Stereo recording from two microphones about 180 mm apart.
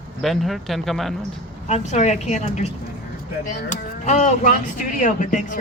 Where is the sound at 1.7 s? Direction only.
40° left (ahead or behind).